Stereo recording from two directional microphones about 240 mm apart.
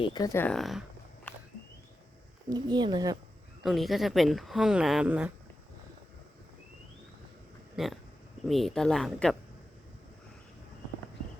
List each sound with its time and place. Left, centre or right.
0.0 s speech: centre
2.5 s speech: centre
3.6 s speech: centre
7.8 s speech: centre